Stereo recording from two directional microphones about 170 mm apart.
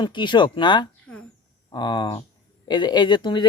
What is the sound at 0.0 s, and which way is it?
A child's voice, 25° left (ahead or behind).